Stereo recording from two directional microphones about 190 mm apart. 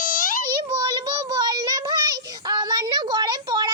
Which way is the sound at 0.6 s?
25° right (ahead or behind).